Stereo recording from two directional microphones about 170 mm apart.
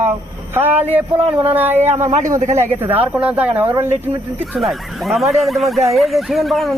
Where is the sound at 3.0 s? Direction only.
5° right (ahead or behind).